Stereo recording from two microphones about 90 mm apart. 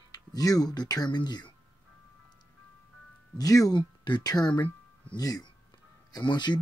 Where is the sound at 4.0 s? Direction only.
55° left (ahead or behind).